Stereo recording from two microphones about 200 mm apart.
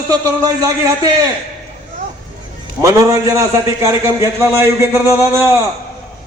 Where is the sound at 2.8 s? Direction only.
15° right (ahead or behind).